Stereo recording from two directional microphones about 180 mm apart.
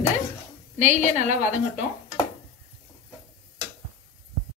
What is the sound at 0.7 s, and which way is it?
Speech, 40° right (ahead or behind).